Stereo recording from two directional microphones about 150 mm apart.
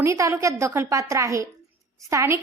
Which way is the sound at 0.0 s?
20° right (ahead or behind).